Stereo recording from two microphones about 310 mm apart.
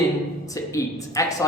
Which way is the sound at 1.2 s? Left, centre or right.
Centre.